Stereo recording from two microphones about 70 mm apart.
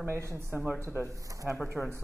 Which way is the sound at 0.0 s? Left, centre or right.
Right.